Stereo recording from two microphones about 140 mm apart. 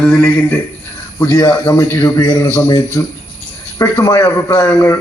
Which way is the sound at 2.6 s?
30° left (ahead or behind).